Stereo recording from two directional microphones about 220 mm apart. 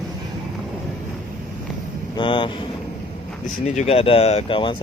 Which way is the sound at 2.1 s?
20° left (ahead or behind).